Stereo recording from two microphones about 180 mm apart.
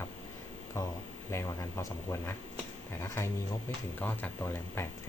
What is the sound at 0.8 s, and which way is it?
Speech, 15° left (ahead or behind).